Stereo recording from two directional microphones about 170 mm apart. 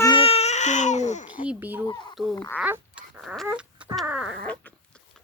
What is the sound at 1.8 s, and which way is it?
Speech, 25° left (ahead or behind).